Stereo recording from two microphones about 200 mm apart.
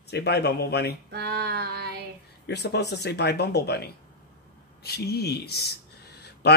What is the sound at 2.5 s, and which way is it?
Speech, 55° left (ahead or behind).